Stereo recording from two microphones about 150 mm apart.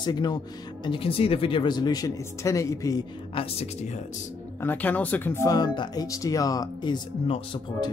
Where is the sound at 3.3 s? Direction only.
45° left (ahead or behind).